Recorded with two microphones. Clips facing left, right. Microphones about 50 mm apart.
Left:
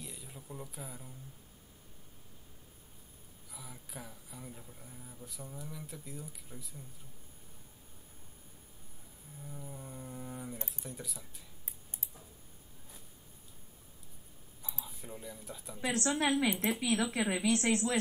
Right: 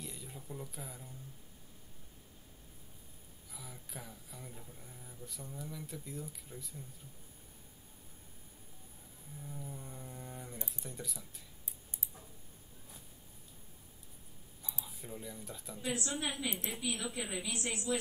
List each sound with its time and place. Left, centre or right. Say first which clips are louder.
0.0 s a sound: right 1 dB; centre
3.4 s speech: left 1 dB; centre
9.4 s speech: even; centre
14.8 s speech: right 1 dB; centre
15.8 s a woman's voice: left 6 dB; left